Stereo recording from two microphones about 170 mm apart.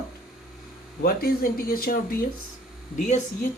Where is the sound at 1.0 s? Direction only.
60° left (ahead or behind).